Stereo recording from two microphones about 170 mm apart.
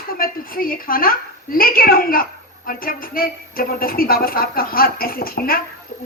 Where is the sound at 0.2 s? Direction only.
55° left (ahead or behind).